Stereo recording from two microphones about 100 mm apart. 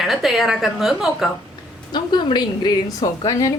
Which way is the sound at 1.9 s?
50° left (ahead or behind).